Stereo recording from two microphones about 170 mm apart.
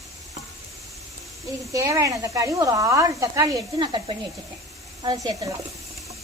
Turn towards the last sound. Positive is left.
turn(degrees=-20)  # may be behind; listen again after turning